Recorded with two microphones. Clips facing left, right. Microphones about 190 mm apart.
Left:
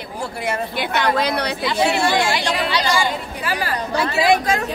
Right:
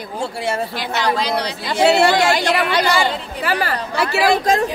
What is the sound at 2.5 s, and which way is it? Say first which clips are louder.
A woman's voice: right 3 dB; 55° right (ahead or behind).